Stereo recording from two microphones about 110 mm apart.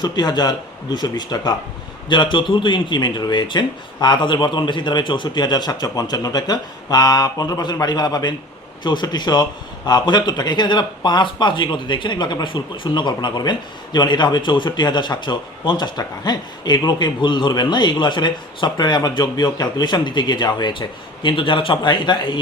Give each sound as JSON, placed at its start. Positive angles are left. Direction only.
{"t": 0.0, "sound": "a man's voice", "side_deg": 40}